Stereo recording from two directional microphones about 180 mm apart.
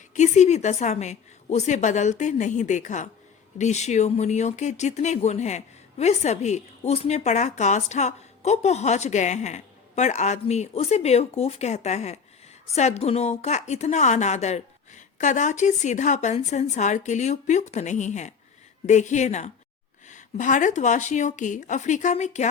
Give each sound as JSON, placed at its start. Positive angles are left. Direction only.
{"t": 0.1, "sound": "speech", "side_deg": 40}